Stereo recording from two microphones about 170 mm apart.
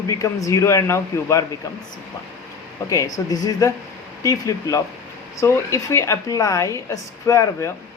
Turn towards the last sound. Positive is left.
turn(degrees=15)  # may be behind; listen again after turning